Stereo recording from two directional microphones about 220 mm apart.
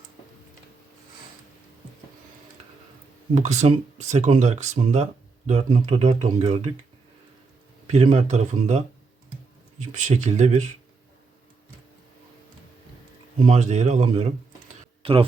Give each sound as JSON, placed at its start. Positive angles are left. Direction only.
{"t": 3.3, "sound": "speech", "side_deg": -30}
{"t": 7.9, "sound": "speech", "side_deg": -30}
{"t": 10.0, "sound": "speech", "side_deg": -35}
{"t": 13.5, "sound": "speech", "side_deg": -30}